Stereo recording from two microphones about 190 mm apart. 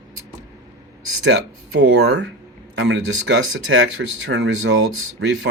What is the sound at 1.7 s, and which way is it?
Speech, 75° right (ahead or behind).